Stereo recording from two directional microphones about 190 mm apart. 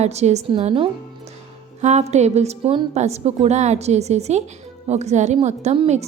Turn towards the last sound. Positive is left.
turn(degrees=-35)  # may be behind; listen again after turning